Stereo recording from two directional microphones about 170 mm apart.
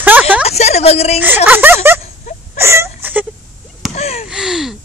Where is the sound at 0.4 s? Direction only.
40° left (ahead or behind).